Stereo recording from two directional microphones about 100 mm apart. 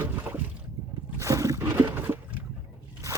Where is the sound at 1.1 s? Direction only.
30° right (ahead or behind).